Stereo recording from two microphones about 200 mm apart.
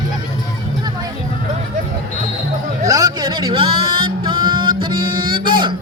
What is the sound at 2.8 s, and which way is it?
Music, 20° right (ahead or behind).